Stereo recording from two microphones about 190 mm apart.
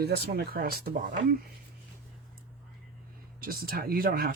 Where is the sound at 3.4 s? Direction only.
50° right (ahead or behind).